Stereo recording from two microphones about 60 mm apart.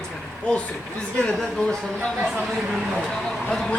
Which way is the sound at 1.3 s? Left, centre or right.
Centre.